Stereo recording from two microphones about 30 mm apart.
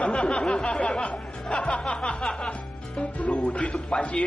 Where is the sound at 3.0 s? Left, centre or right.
Left.